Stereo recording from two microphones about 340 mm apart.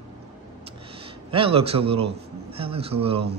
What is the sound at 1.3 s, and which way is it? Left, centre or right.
Speech, centre.